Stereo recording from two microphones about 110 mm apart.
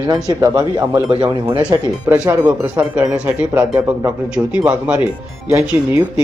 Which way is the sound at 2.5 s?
15° right (ahead or behind).